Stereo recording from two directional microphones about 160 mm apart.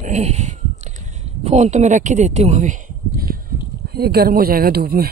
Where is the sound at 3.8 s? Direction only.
75° right (ahead or behind).